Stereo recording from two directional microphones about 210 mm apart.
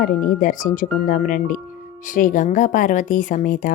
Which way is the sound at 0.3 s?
40° left (ahead or behind).